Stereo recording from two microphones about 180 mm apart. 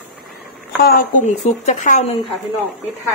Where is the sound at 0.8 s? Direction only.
55° left (ahead or behind); by 2.2 s 40° left (ahead or behind).